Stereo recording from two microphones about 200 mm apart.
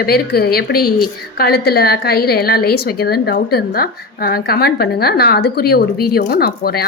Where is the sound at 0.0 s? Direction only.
50° left (ahead or behind).